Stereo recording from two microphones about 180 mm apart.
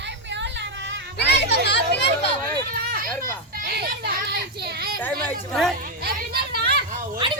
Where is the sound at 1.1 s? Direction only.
70° left (ahead or behind).